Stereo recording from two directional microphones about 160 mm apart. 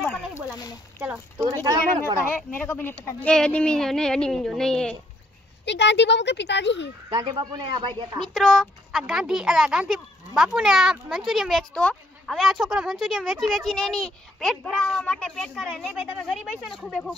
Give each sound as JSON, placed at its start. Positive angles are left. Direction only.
{"t": 0.3, "sound": "a sound", "side_deg": 25}
{"t": 0.9, "sound": "speech", "side_deg": -10}
{"t": 1.4, "sound": "speech", "side_deg": -20}
{"t": 2.7, "sound": "speech", "side_deg": 15}
{"t": 5.7, "sound": "speech", "side_deg": 90}
{"t": 7.1, "sound": "speech", "side_deg": -30}
{"t": 8.2, "sound": "speech", "side_deg": 0}